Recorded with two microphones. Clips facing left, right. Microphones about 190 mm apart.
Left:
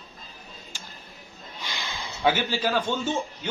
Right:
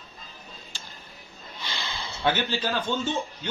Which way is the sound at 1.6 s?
15° left (ahead or behind).